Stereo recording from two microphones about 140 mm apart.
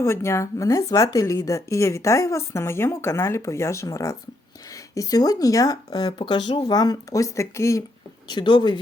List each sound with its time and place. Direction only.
0.0 s speech: 20° left (ahead or behind)
8.3 s speech: 30° left (ahead or behind)